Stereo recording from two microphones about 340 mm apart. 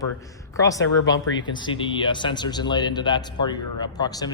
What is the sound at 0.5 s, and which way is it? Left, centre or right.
Speech, centre.